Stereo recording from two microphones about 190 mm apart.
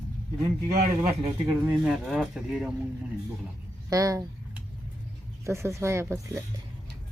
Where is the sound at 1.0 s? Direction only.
15° right (ahead or behind).